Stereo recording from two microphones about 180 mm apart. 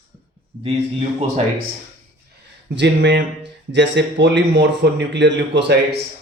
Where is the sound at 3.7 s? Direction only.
85° right.